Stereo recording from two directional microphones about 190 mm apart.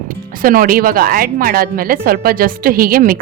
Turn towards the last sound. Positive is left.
turn(degrees=-50)  # may be behind; listen again after turning